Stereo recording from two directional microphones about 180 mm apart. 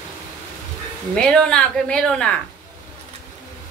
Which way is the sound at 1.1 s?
5° left (ahead or behind).